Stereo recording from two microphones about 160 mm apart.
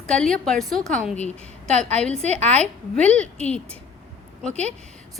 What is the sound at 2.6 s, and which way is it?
A woman's voice, 5° left (ahead or behind).